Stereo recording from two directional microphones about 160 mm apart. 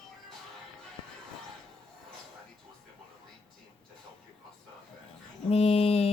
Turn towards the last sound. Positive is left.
turn(degrees=40)  # may be behind; listen again after turning